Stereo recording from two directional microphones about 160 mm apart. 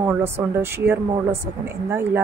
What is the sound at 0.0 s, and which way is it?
A woman's voice, 15° right (ahead or behind).